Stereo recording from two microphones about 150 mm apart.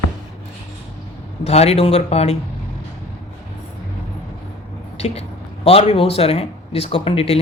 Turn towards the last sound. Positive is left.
turn(degrees=40)  # may be behind; listen again after turning